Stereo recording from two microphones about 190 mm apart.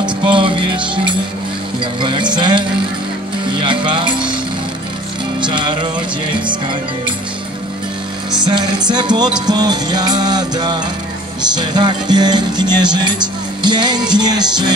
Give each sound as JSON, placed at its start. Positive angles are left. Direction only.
{"t": 0.0, "sound": "music", "side_deg": -25}
{"t": 5.4, "sound": "music", "side_deg": -25}
{"t": 8.3, "sound": "music", "side_deg": -20}